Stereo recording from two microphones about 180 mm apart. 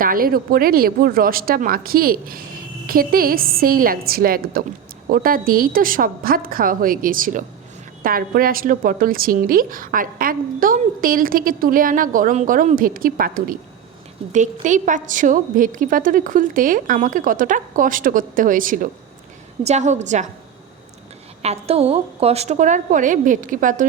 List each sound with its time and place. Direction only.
0.0 s a woman's voice: 50° right (ahead or behind)
21.4 s a woman's voice: 35° right (ahead or behind)